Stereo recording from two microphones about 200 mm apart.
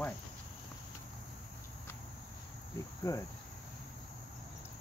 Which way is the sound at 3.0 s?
15° left (ahead or behind).